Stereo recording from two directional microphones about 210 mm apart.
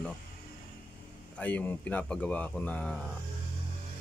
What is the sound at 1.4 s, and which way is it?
Speech, 5° left (ahead or behind).